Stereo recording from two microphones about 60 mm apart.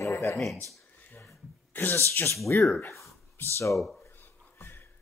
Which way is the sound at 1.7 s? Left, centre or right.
Left.